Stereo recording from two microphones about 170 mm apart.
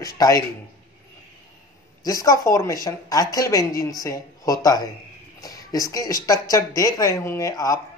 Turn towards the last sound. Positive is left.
turn(degrees=20)  # may be behind; listen again after turning